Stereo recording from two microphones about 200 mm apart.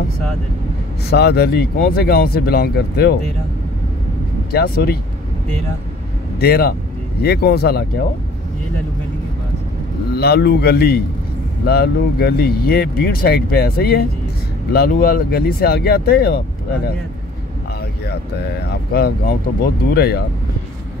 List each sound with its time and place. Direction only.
1.1 s speech: 55° left (ahead or behind)
4.5 s speech: 50° left (ahead or behind)
6.4 s speech: 50° left (ahead or behind)
10.1 s speech: 50° left (ahead or behind)
18.9 s speech: 50° left (ahead or behind)